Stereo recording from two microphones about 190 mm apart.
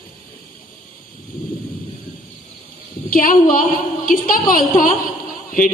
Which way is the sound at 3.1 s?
45° left (ahead or behind).